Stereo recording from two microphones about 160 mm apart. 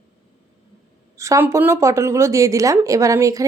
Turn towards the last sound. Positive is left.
turn(degrees=-20)  # may be behind; listen again after turning